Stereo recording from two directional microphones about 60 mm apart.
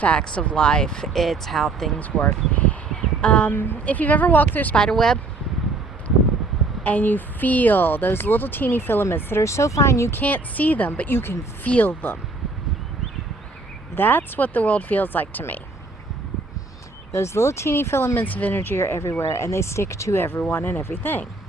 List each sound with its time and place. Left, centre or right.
0.0 s speech: centre
2.0 s speech: left
4.7 s speech: centre
6.8 s speech: left
10.1 s speech: left
11.6 s speech: left
13.9 s speech: left
17.1 s speech: left
18.3 s speech: left
20.5 s speech: left